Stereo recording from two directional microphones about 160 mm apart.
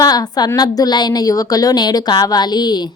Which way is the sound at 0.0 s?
25° left (ahead or behind).